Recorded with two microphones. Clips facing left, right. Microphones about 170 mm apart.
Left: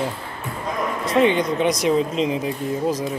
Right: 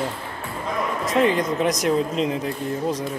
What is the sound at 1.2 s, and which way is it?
Speech, centre (ahead or behind).